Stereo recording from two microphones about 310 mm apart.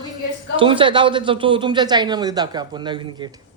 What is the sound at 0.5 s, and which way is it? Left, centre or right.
Speech, centre.